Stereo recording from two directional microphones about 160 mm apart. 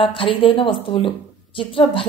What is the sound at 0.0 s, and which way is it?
Speech, 35° left (ahead or behind).